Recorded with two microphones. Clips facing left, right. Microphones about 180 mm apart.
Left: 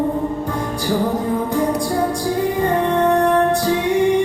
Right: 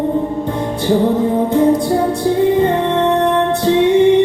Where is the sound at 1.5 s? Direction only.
25° right (ahead or behind).